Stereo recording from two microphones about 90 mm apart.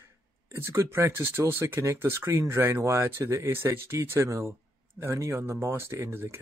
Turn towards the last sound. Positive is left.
turn(degrees=-25)  # may be behind; listen again after turning